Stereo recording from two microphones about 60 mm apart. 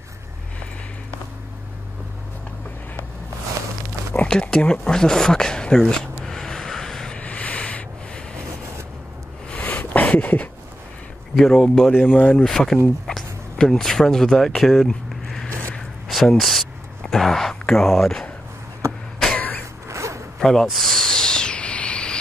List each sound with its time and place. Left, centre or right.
4.3 s a sound: centre
7.2 s a sound: left
9.5 s a sound: left
11.3 s speech: centre
11.9 s speech: left
12.4 s speech: centre
14.5 s a sound: centre
16.1 s speech: centre
18.9 s vehicle: centre
19.3 s vehicle: left
19.9 s zipper: right
20.3 s owl: centre